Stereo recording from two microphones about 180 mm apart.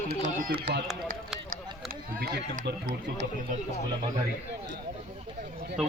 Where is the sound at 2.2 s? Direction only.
70° right (ahead or behind).